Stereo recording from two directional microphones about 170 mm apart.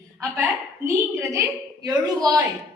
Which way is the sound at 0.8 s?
20° right (ahead or behind).